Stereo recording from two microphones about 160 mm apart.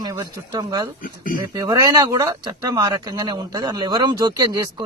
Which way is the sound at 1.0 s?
60° left (ahead or behind).